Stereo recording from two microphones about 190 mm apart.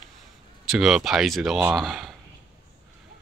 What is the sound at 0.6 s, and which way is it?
Speech, centre (ahead or behind).